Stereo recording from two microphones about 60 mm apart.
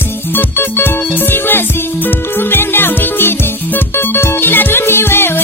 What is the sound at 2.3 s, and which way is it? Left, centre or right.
Music, left.